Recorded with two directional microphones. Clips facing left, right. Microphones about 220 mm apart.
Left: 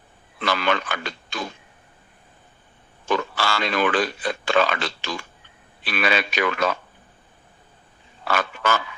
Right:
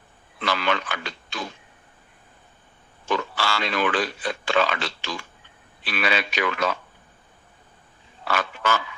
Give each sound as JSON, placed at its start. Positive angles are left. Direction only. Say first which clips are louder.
{"t": 0.4, "sound": "speech", "louder": "left 2 dB", "side_deg": 50}
{"t": 3.1, "sound": "speech", "louder": "left 2 dB", "side_deg": 45}
{"t": 8.3, "sound": "speech", "louder": "left 2 dB", "side_deg": 45}